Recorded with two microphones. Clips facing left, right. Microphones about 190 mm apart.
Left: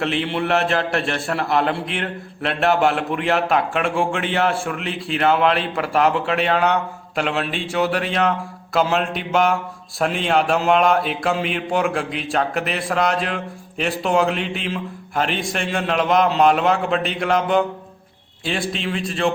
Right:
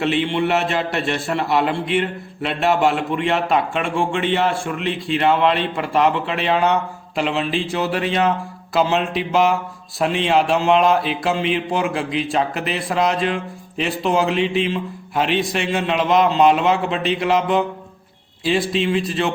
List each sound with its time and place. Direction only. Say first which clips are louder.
0.0 s speech: right 3 dB; centre (ahead or behind)